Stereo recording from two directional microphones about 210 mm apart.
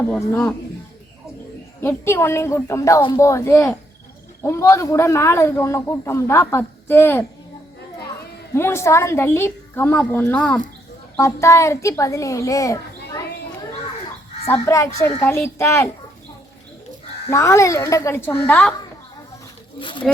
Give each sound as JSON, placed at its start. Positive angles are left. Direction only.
{"t": 0.2, "sound": "speech", "side_deg": 5}
{"t": 1.8, "sound": "a man's voice", "side_deg": 10}
{"t": 8.5, "sound": "a man's voice", "side_deg": 10}
{"t": 14.4, "sound": "a man's voice", "side_deg": 15}
{"t": 17.2, "sound": "a man's voice", "side_deg": 15}
{"t": 19.8, "sound": "speech", "side_deg": 25}